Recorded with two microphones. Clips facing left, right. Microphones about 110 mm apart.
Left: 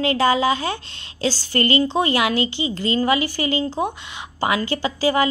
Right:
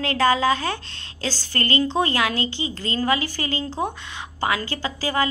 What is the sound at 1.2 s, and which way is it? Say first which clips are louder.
Speech: left 6 dB; 50° right (ahead or behind).